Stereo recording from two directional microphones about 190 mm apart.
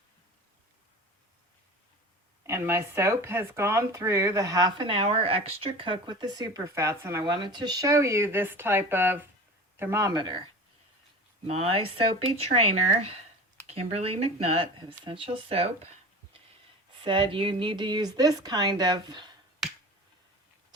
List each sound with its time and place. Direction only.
2.5 s speech: 15° right (ahead or behind); by 15.9 s 30° right (ahead or behind)
17.0 s speech: 25° right (ahead or behind)